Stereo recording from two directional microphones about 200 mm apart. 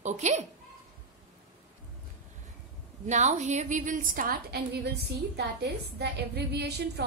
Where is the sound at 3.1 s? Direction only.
35° right (ahead or behind); by 6.7 s 55° right (ahead or behind).